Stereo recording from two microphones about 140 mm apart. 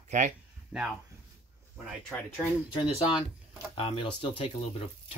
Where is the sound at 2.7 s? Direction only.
40° left (ahead or behind).